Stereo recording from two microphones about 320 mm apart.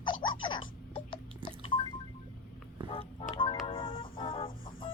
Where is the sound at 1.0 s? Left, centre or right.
Centre.